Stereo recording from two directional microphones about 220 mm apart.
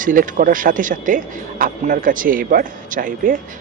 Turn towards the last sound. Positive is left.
turn(degrees=-35)  # may be behind; listen again after turning